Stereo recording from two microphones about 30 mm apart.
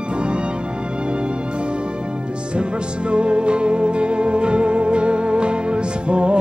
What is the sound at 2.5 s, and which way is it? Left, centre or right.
Music, right.